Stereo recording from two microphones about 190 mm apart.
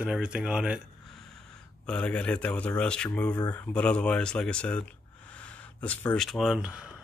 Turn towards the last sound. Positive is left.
turn(degrees=-5)  # may be behind; listen again after turning